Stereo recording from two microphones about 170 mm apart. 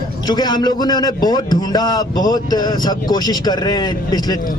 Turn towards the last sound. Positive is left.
turn(degrees=25)  # may be behind; listen again after turning